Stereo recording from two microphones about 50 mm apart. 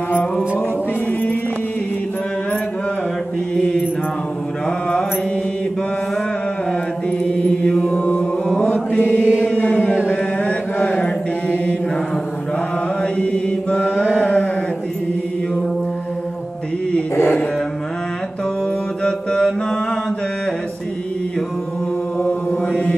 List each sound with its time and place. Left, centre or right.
4.6 s mantra: centre
7.1 s mantra: centre
7.7 s mantra: centre
8.2 s music: centre
9.0 s chant: left
10.3 s mantra: left
13.0 s mantra: centre
13.9 s mantra: centre
17.1 s dog: left
19.0 s mantra: centre
22.2 s mantra: centre